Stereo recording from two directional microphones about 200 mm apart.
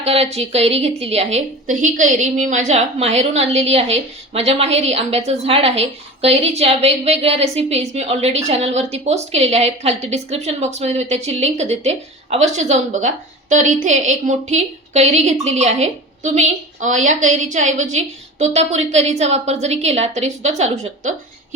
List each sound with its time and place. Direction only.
0.0 s a woman's voice: 30° right (ahead or behind)